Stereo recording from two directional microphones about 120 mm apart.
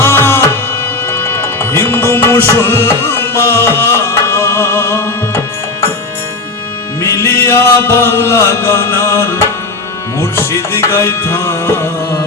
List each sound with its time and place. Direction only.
0.0 s music: 20° left (ahead or behind)
7.0 s music: 20° left (ahead or behind)